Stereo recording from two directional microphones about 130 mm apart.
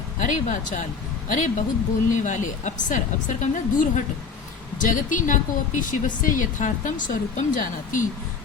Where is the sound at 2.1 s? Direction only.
70° left (ahead or behind).